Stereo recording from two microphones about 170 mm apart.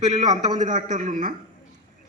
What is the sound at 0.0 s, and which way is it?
A man's voice, 40° right (ahead or behind).